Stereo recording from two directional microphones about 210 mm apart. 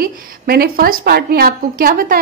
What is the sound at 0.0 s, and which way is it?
A woman's voice, 45° right (ahead or behind).